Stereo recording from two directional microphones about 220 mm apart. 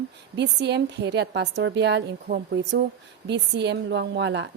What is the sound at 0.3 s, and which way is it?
Speech, 50° right (ahead or behind).